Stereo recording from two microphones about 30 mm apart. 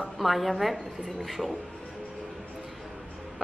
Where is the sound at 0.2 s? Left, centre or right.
Centre.